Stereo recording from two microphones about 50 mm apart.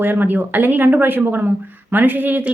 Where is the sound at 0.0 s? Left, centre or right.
Right.